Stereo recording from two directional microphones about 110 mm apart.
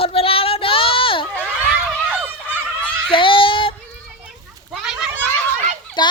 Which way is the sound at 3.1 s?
50° left (ahead or behind).